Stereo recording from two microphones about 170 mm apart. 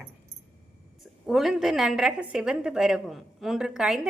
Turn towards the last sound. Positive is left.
turn(degrees=-5)  # may be behind; listen again after turning